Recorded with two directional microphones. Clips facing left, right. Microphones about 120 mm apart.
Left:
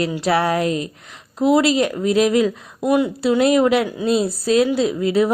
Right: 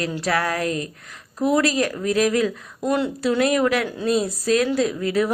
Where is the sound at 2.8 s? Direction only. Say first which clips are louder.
Left 4 dB; 10° left (ahead or behind).